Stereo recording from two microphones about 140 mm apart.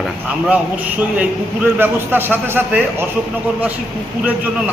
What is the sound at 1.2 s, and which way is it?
A man's voice, 10° right (ahead or behind).